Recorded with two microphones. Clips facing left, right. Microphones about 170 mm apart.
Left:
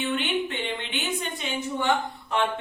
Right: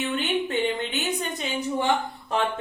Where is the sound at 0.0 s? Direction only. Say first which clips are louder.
Right 1 dB; 40° right (ahead or behind).